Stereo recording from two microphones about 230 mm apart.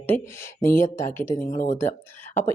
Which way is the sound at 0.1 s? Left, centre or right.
Centre.